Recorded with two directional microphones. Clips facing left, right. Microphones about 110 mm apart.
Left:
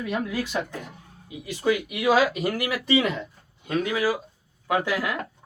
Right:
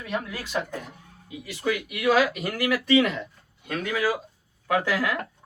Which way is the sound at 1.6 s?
20° left (ahead or behind).